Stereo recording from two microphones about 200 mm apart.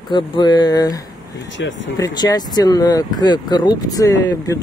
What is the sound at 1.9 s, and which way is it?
Speech, 20° left (ahead or behind).